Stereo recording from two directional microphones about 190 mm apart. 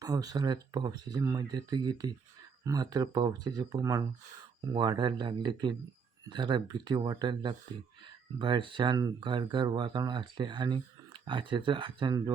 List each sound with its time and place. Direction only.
0.0 s speech: 20° right (ahead or behind)